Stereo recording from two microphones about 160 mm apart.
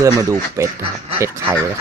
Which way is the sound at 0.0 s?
20° right (ahead or behind).